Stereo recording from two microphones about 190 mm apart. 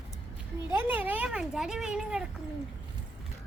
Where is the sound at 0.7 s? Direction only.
10° right (ahead or behind).